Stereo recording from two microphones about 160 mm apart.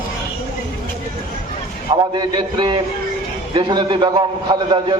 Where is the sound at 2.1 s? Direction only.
30° right (ahead or behind).